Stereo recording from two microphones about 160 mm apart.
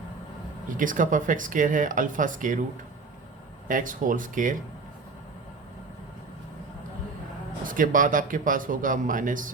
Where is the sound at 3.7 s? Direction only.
55° right (ahead or behind).